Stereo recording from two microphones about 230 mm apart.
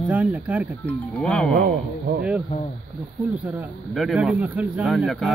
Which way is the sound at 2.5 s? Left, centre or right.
Left.